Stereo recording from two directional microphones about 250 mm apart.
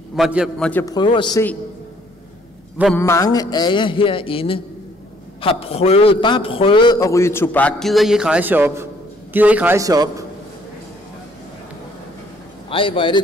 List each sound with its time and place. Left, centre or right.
0.1 s a man's voice: centre
3.0 s a man's voice: centre
12.6 s a man's voice: left